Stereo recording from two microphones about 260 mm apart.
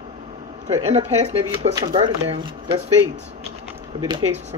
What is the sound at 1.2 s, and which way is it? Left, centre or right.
Speech, right.